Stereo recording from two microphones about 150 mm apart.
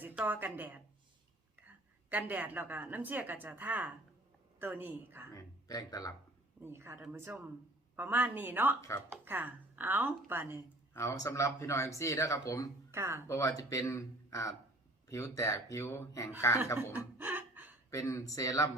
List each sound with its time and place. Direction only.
0.0 s a woman's voice: 10° right (ahead or behind)
5.3 s speech: 25° left (ahead or behind)
6.6 s speech: 15° right (ahead or behind)
10.9 s a man's voice: 20° left (ahead or behind)
12.9 s speech: 15° right (ahead or behind)
13.2 s a man's voice: 20° left (ahead or behind)
17.2 s gasp: 10° right (ahead or behind)
17.9 s a man's voice: 20° left (ahead or behind)